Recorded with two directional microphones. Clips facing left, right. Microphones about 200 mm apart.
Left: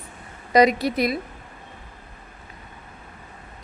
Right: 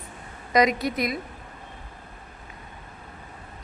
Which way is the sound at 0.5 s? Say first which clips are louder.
Left 4 dB; 30° left (ahead or behind).